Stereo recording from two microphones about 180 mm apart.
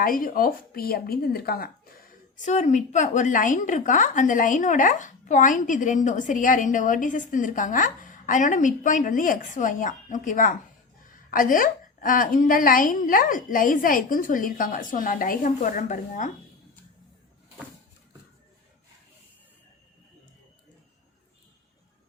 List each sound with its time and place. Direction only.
0.0 s speech: 50° left (ahead or behind)
2.5 s a woman's voice: 40° left (ahead or behind)